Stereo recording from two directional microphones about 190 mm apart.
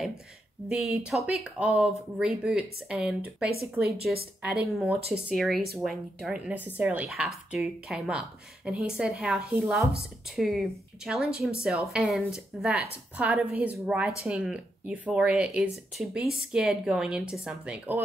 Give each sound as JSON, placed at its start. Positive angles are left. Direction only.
{"t": 0.7, "sound": "a woman's voice", "side_deg": 0}
{"t": 3.8, "sound": "speech", "side_deg": -55}
{"t": 4.6, "sound": "a woman's voice", "side_deg": -5}